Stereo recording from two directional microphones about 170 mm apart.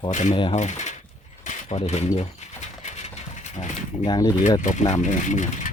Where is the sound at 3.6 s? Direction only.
45° left (ahead or behind).